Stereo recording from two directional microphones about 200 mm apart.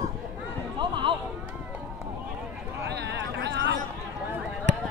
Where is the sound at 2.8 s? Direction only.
60° right (ahead or behind).